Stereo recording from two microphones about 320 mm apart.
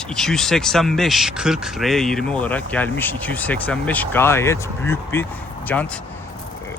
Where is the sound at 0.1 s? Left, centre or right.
Centre.